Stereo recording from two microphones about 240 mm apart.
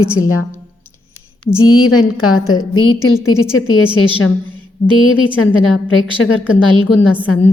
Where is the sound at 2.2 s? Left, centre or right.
Left.